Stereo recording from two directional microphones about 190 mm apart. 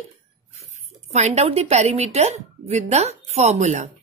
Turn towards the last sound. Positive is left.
turn(degrees=-40)  # may be behind; listen again after turning